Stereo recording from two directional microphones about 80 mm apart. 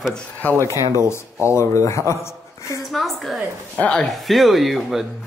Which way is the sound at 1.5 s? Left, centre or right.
Left.